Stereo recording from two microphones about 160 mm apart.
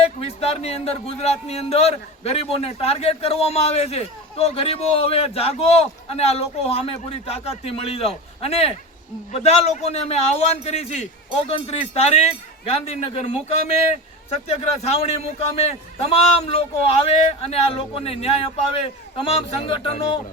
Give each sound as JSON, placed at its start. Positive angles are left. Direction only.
{"t": 0.0, "sound": "speech", "side_deg": 40}